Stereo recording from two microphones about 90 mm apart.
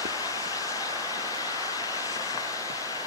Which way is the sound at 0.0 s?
40° left (ahead or behind).